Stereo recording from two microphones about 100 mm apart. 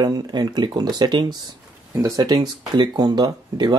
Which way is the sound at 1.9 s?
30° right (ahead or behind).